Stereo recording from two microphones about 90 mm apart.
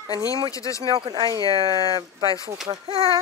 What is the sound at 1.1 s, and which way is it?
Speech, 50° right (ahead or behind).